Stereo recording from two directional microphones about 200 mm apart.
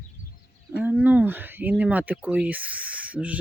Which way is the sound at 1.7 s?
5° right (ahead or behind).